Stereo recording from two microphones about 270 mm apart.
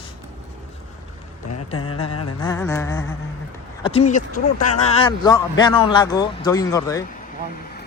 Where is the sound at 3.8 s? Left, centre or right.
Left.